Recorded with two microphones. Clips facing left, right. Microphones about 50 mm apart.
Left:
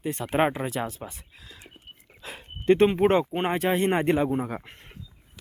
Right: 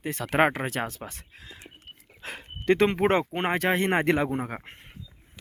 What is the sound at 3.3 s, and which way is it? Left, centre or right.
Speech, right.